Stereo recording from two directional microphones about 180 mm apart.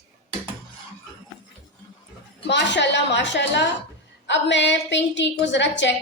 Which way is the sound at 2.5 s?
75° left (ahead or behind).